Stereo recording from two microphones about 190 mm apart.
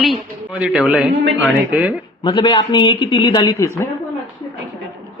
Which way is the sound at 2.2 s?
25° left (ahead or behind).